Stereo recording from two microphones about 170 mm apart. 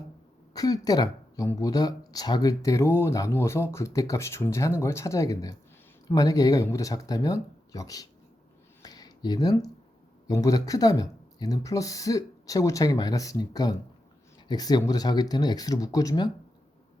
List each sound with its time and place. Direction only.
0.5 s speech: 20° left (ahead or behind)
8.8 s a sound: 20° left (ahead or behind)
10.2 s speech: 20° left (ahead or behind)